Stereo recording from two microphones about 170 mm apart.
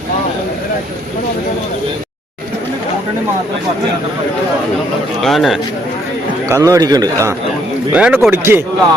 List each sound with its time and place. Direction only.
5.2 s speech: centre (ahead or behind)
6.5 s a man's voice: 20° right (ahead or behind)
7.9 s speech: 5° right (ahead or behind)